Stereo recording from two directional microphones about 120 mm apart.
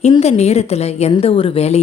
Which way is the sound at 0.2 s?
65° left (ahead or behind).